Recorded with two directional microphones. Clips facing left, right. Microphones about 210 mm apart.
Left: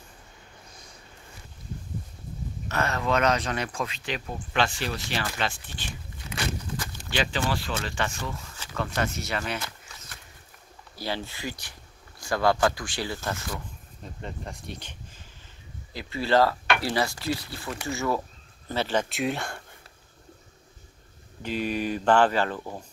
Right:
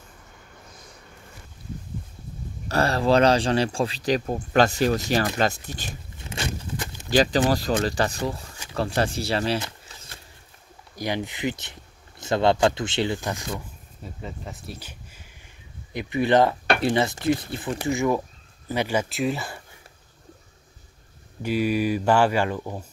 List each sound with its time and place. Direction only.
2.7 s speech: 35° right (ahead or behind)
6.3 s a sound: 20° right (ahead or behind)
7.1 s speech: 40° right (ahead or behind)
9.6 s a sound: 25° right (ahead or behind)
11.0 s speech: 15° right (ahead or behind)
14.0 s speech: 5° right (ahead or behind)
15.9 s speech: 20° right (ahead or behind)
19.0 s speech: centre (ahead or behind)
21.4 s speech: 10° right (ahead or behind)